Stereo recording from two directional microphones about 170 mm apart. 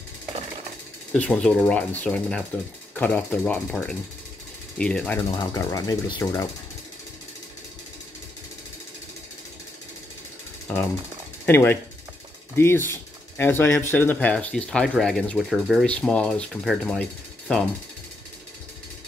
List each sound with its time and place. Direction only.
1.1 s speech: 5° left (ahead or behind)
5.2 s speech: 25° left (ahead or behind)
11.4 s speech: 15° left (ahead or behind)